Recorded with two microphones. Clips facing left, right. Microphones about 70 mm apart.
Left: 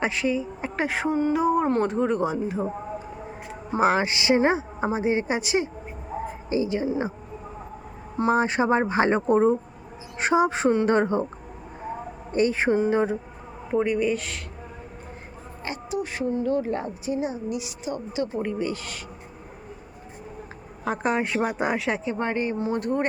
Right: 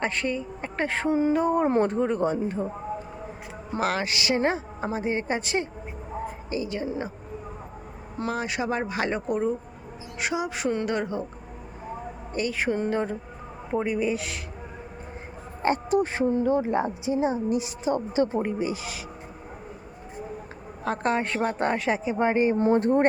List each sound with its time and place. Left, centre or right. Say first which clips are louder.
0.0 s a woman's voice: left 3 dB; centre
3.7 s a woman's voice: left 5 dB; left
8.2 s speech: left 7 dB; left
12.3 s a woman's voice: left 5 dB; left
12.7 s a woman's voice: left 5 dB; centre
13.7 s a woman's voice: left 3 dB; centre
15.6 s speech: right 7 dB; right
16.5 s speech: right 2 dB; centre
18.4 s speech: even; centre
20.8 s a woman's voice: left 1 dB; centre
22.7 s speech: right 4 dB; right